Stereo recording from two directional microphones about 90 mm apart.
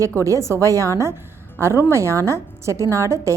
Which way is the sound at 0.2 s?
35° right (ahead or behind).